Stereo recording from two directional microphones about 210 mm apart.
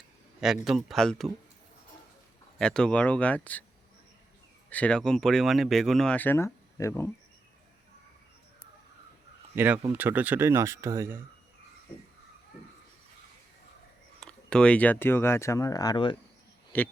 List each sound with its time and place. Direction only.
0.3 s speech: centre (ahead or behind)
2.6 s speech: 5° left (ahead or behind)
4.7 s speech: 5° left (ahead or behind)
9.6 s speech: 5° right (ahead or behind)
14.2 s speech: 5° left (ahead or behind); by 16.1 s 20° left (ahead or behind)
16.7 s a man's voice: 10° left (ahead or behind)